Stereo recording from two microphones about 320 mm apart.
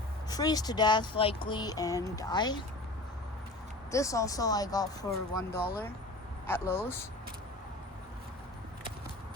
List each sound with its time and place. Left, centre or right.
0.3 s speech: centre
3.9 s speech: centre
5.5 s speech: left
6.5 s speech: centre